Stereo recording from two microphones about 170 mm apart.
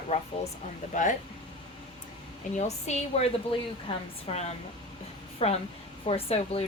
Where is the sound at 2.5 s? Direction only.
40° left (ahead or behind).